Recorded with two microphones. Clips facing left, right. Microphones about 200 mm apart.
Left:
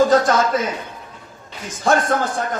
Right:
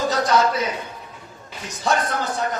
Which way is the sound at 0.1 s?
50° left (ahead or behind).